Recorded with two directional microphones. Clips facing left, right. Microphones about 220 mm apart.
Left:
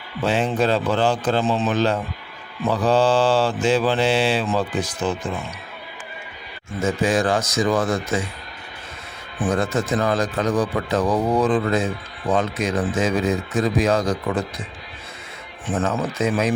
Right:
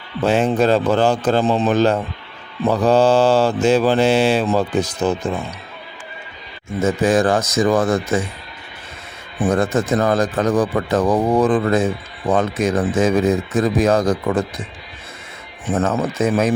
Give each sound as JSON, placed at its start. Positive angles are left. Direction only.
{"t": 0.3, "sound": "mantra", "side_deg": -45}
{"t": 6.8, "sound": "mantra", "side_deg": -45}
{"t": 9.4, "sound": "mantra", "side_deg": -45}
{"t": 15.7, "sound": "mantra", "side_deg": -40}